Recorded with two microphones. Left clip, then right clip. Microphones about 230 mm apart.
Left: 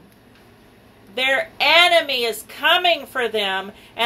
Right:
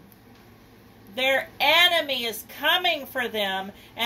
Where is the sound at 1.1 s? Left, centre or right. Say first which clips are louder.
Left 4 dB; right.